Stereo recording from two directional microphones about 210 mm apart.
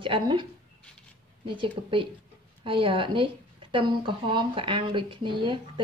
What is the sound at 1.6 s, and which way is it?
Speech, 25° right (ahead or behind).